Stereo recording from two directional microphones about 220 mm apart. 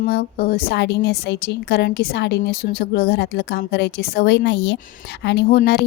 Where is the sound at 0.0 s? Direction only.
40° left (ahead or behind).